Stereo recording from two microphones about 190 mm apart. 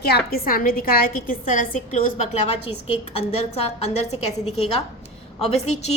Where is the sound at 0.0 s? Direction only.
55° left (ahead or behind); by 5.9 s 35° left (ahead or behind).